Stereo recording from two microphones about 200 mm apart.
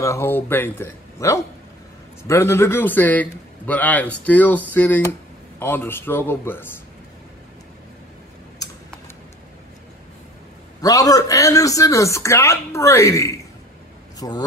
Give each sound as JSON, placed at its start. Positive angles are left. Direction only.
{"t": 0.0, "sound": "speech", "side_deg": 15}
{"t": 10.8, "sound": "speech", "side_deg": 15}